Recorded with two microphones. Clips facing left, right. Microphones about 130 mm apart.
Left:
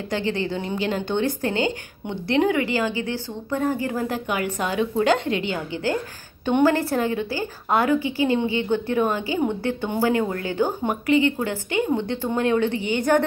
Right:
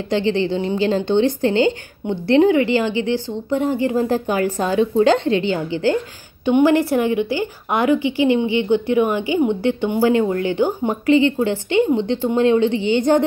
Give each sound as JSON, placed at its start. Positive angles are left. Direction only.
{"t": 0.1, "sound": "a woman's voice", "side_deg": -25}
{"t": 6.4, "sound": "a woman's voice", "side_deg": -15}